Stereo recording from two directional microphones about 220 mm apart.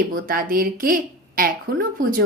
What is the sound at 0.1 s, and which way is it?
Speech, 40° right (ahead or behind).